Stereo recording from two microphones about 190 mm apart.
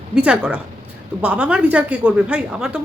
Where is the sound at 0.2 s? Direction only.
5° right (ahead or behind).